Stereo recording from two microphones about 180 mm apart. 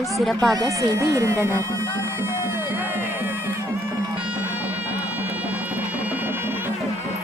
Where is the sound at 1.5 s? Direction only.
15° right (ahead or behind).